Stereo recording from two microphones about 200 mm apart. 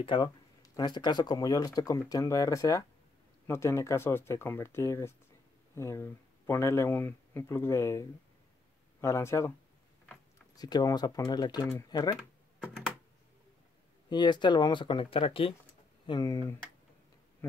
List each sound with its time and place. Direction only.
0.0 s speech: 25° left (ahead or behind)
10.5 s speech: 20° left (ahead or behind)
14.0 s speech: 20° left (ahead or behind)